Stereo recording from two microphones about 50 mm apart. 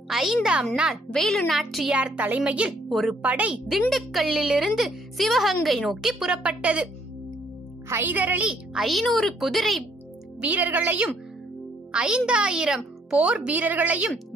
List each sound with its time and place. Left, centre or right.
0.1 s a child's voice: centre
1.1 s speech: centre
1.9 s speech: centre
2.1 s speech: right
2.9 s speech: centre
3.2 s speech: right
3.9 s a child's voice: centre
6.4 s speech: right
8.1 s speech: right
8.7 s speech: centre
10.4 s speech: right
11.9 s speech: centre
13.6 s speech: right